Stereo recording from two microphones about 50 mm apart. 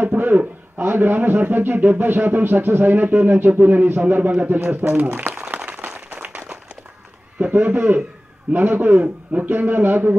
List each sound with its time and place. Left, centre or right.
0.2 s a man's voice: right
6.2 s a sound: right
7.3 s a man's voice: right
7.6 s a man's voice: right